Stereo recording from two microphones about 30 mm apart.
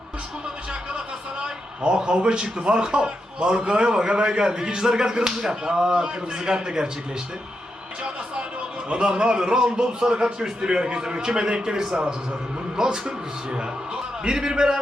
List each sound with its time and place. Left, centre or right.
0.7 s a sound: right
2.6 s a man's voice: right
8.9 s a man's voice: right
11.8 s a man's voice: centre